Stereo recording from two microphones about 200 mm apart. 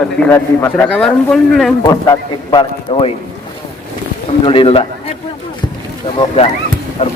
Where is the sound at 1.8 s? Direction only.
20° left (ahead or behind).